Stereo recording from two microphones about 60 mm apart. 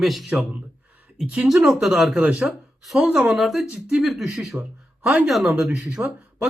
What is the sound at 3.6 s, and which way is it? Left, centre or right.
Speech, centre.